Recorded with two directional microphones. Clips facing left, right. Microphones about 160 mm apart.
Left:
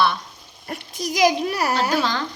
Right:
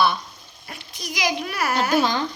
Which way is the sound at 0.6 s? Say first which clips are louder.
Left 7 dB; 45° left (ahead or behind).